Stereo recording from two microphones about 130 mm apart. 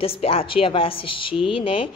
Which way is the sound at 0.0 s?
45° left (ahead or behind).